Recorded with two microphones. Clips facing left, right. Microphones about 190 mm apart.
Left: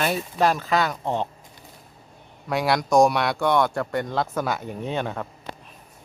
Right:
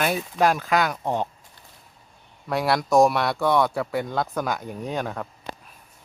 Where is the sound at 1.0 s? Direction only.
10° right (ahead or behind).